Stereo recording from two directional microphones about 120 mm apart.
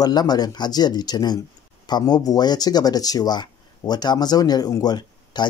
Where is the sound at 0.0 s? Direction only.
35° left (ahead or behind).